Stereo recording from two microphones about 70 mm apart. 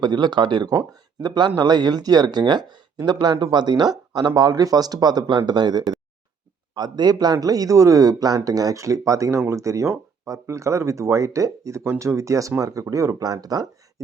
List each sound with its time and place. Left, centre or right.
0.0 s speech: right
0.8 s speech: right